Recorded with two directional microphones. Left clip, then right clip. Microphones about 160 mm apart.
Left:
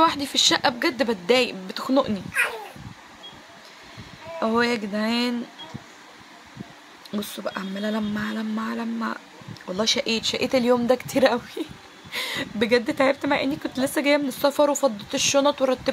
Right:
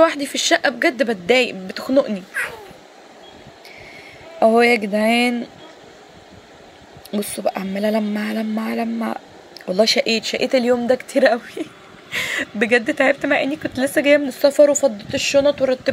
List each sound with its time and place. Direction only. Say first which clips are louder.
0.0 s speech: right 3 dB; 10° right (ahead or behind)
4.4 s speech: right 9 dB; 25° right (ahead or behind)
7.2 s speech: right 8 dB; 25° right (ahead or behind); by 15.9 s 5° right (ahead or behind)